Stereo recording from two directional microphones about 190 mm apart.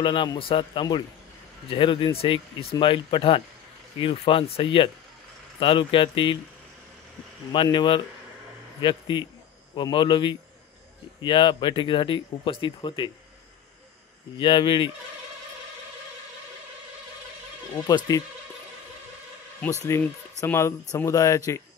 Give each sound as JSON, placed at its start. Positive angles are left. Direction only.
{"t": 0.0, "sound": "speech", "side_deg": 25}
{"t": 7.5, "sound": "speech", "side_deg": 25}
{"t": 14.4, "sound": "speech", "side_deg": 25}
{"t": 17.8, "sound": "speech", "side_deg": 20}
{"t": 19.9, "sound": "speech", "side_deg": 10}